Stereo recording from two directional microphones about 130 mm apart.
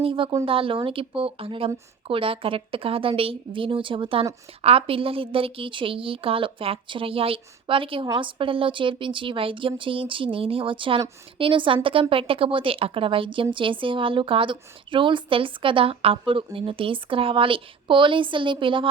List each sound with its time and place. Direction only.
0.0 s a woman's voice: 40° right (ahead or behind)